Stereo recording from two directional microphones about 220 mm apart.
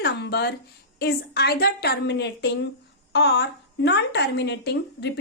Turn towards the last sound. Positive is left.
turn(degrees=50)  # may be behind; listen again after turning